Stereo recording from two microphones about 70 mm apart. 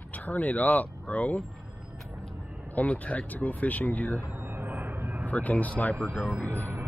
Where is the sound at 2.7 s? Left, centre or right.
Centre.